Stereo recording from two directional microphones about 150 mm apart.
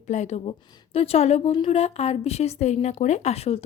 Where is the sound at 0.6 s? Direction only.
30° left (ahead or behind).